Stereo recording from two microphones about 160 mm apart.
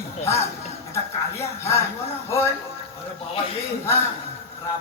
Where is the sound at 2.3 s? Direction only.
15° left (ahead or behind).